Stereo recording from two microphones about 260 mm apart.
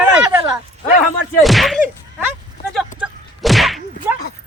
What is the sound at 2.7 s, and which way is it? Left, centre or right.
Whip, centre.